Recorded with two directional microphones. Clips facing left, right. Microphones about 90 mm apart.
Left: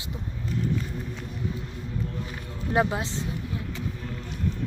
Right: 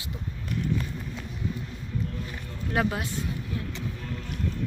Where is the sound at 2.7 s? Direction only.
25° left (ahead or behind).